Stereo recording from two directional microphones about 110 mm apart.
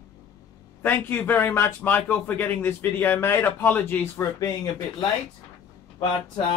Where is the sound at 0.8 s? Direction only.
15° left (ahead or behind).